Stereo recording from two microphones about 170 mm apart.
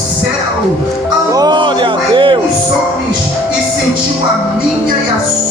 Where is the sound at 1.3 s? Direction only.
25° right (ahead or behind).